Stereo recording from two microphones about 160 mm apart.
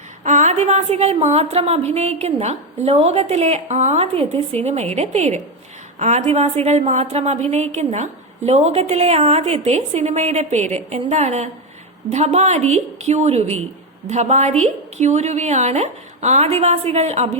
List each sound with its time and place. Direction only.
0.3 s a woman's voice: 50° right (ahead or behind)